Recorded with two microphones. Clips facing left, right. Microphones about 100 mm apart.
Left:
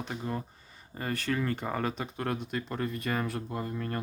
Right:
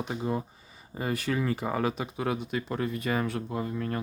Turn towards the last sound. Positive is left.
turn(degrees=0)  # may be behind; listen again after turning